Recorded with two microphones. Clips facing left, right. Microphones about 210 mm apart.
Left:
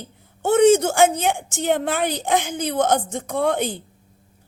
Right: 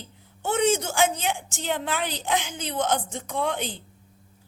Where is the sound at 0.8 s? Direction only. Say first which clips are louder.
Left 7 dB; 50° left (ahead or behind).